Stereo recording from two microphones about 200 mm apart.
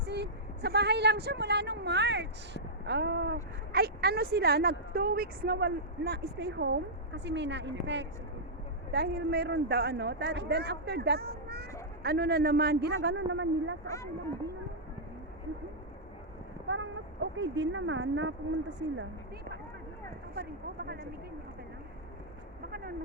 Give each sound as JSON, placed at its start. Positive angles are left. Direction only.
{"t": 0.0, "sound": "speech", "side_deg": -55}
{"t": 8.9, "sound": "speech", "side_deg": -50}
{"t": 13.8, "sound": "speech", "side_deg": 15}
{"t": 16.6, "sound": "speech", "side_deg": -70}
{"t": 20.3, "sound": "speech", "side_deg": -50}